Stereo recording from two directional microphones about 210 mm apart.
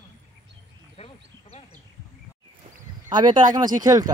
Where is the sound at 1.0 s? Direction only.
30° left (ahead or behind).